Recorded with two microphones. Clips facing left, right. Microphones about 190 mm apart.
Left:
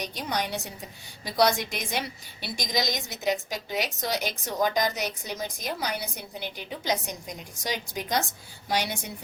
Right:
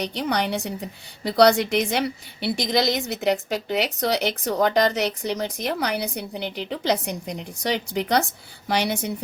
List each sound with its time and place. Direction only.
0.0 s a woman's voice: 65° right (ahead or behind)